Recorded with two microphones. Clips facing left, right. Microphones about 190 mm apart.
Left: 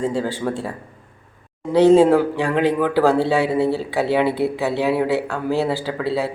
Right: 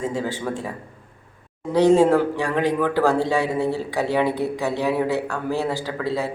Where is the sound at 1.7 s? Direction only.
15° right (ahead or behind).